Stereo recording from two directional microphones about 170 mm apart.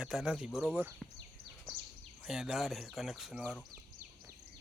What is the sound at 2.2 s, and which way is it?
Speech, 5° right (ahead or behind).